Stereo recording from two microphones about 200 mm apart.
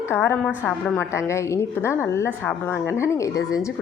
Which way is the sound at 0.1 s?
10° left (ahead or behind).